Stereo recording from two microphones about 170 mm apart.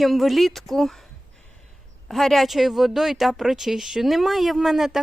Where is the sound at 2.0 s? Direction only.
Centre (ahead or behind).